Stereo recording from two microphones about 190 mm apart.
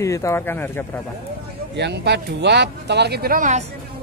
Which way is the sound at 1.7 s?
60° right (ahead or behind).